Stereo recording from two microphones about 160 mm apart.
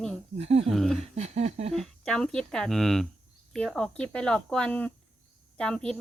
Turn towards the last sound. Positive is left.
turn(degrees=5)  # may be behind; listen again after turning